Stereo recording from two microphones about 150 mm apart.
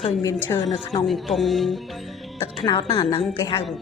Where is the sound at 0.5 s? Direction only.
25° left (ahead or behind).